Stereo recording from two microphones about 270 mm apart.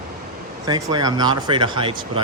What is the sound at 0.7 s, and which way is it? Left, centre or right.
Speech, centre.